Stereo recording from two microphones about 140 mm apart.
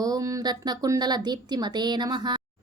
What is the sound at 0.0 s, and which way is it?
A woman's voice, 25° right (ahead or behind).